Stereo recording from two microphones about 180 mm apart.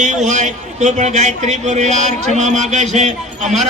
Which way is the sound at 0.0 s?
40° right (ahead or behind).